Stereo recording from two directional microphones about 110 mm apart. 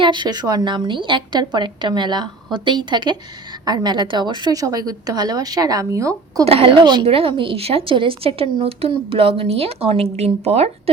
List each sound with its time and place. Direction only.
0.0 s a woman's voice: 45° right (ahead or behind)
6.4 s a woman's voice: 60° right (ahead or behind); by 7.0 s 45° right (ahead or behind)
7.0 s speech: 55° right (ahead or behind)